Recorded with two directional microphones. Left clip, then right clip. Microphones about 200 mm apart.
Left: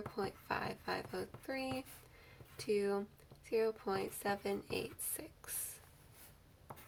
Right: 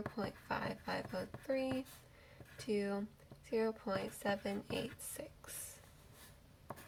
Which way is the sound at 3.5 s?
30° left (ahead or behind).